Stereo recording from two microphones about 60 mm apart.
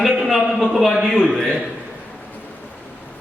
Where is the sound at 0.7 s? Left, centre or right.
Centre.